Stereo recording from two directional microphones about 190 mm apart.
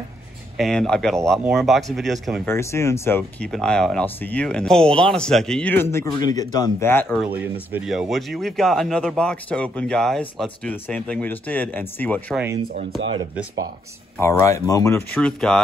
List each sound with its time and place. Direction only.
0.6 s speech: 5° left (ahead or behind)
2.4 s speech: 15° left (ahead or behind)
7.1 s speech: 5° right (ahead or behind)
14.2 s speech: 15° left (ahead or behind)
15.1 s speech: 5° left (ahead or behind)